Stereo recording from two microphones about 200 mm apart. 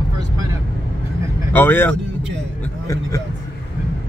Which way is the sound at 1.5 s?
10° left (ahead or behind).